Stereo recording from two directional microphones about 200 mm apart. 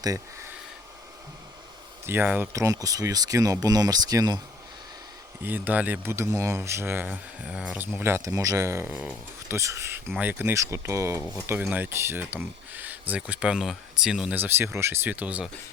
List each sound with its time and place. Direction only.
2.0 s speech: 10° right (ahead or behind)
5.4 s speech: 10° right (ahead or behind)